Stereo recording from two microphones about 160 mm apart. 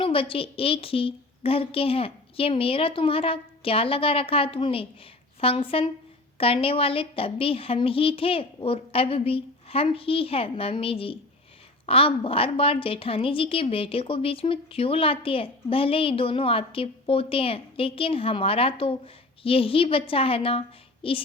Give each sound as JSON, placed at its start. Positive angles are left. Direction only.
{"t": 0.0, "sound": "a woman's voice", "side_deg": 35}